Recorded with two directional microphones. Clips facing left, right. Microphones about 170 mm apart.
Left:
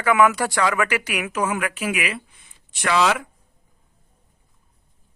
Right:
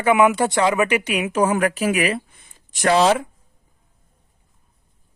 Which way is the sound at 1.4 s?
35° right (ahead or behind).